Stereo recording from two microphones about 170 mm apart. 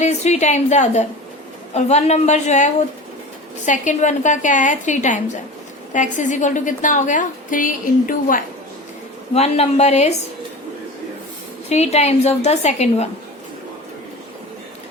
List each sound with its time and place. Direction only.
0.0 s a woman's voice: 40° left (ahead or behind)
3.7 s a woman's voice: 45° left (ahead or behind)
9.3 s a woman's voice: 40° left (ahead or behind)
11.7 s a woman's voice: 40° left (ahead or behind)